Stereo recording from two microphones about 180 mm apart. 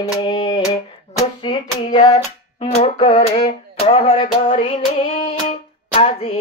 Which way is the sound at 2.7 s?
35° left (ahead or behind).